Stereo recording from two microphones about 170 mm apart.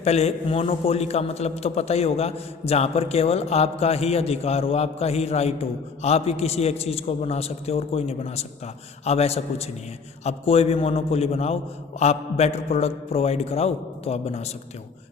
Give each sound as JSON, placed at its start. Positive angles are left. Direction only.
{"t": 0.0, "sound": "a man's voice", "side_deg": 40}